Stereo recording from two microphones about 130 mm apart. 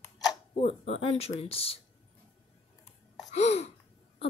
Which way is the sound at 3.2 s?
55° left (ahead or behind).